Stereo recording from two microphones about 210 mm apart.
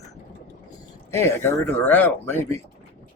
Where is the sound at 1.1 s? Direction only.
10° left (ahead or behind).